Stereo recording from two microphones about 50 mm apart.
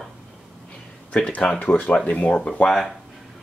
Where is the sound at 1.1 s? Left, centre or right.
Left.